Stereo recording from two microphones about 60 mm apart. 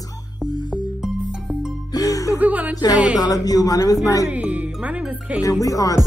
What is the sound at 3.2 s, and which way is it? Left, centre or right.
Speech, left.